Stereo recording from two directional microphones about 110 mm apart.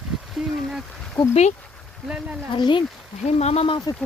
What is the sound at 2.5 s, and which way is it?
Speech, 45° left (ahead or behind).